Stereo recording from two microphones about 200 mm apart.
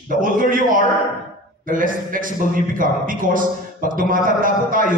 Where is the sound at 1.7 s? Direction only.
40° right (ahead or behind).